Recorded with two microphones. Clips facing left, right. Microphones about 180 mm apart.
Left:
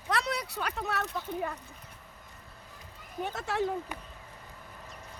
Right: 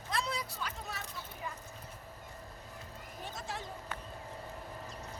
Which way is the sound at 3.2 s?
70° left (ahead or behind).